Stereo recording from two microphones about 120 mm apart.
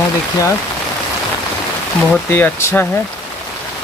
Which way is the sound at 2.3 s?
20° left (ahead or behind).